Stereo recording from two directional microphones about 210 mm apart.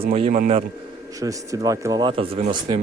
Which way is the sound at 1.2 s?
15° right (ahead or behind).